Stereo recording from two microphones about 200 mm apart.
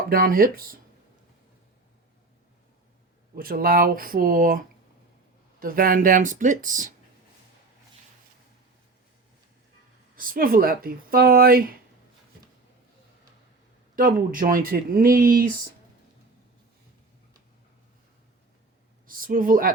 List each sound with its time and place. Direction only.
0.1 s speech: 45° right (ahead or behind)
3.3 s speech: 45° right (ahead or behind)
10.2 s speech: 45° right (ahead or behind)
13.9 s speech: 45° right (ahead or behind)
19.0 s speech: 45° right (ahead or behind)